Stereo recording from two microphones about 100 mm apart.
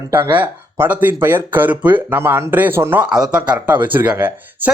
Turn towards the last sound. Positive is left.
turn(degrees=-20)  # may be behind; listen again after turning